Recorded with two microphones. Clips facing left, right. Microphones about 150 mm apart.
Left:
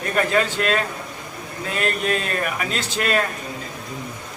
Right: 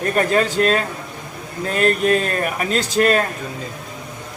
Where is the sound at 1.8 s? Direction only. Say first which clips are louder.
Right 7 dB; 40° right (ahead or behind).